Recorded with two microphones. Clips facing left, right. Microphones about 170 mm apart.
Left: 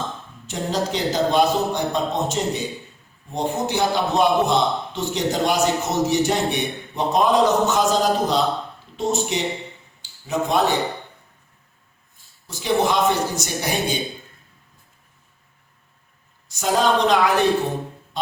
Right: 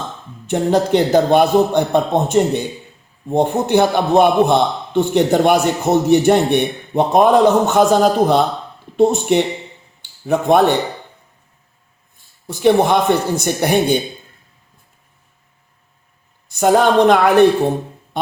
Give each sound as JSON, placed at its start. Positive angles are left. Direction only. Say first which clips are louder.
{"t": 0.4, "sound": "a man's voice", "louder": "right 9 dB", "side_deg": -60}
{"t": 12.5, "sound": "a man's voice", "louder": "right 7 dB", "side_deg": -55}
{"t": 16.5, "sound": "a man's voice", "louder": "right 6 dB", "side_deg": -60}